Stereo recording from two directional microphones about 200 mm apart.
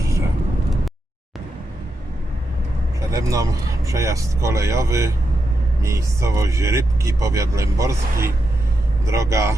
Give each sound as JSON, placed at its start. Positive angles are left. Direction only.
{"t": 3.1, "sound": "speech", "side_deg": -15}